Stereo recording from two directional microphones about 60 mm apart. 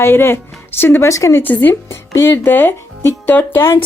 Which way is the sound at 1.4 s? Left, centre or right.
Left.